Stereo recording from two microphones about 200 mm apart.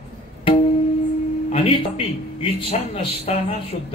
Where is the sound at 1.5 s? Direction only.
30° left (ahead or behind).